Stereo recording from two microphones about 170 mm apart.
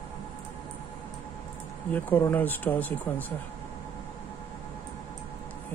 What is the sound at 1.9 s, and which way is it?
Speech, 10° left (ahead or behind).